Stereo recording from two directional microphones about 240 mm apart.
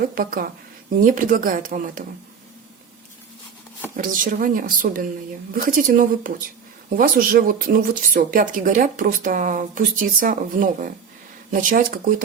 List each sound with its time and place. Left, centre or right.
0.0 s speech: right
3.9 s speech: right